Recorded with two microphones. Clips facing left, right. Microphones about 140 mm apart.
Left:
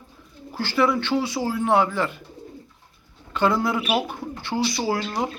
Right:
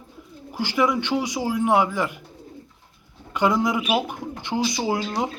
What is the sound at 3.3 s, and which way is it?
A man's voice, 15° right (ahead or behind).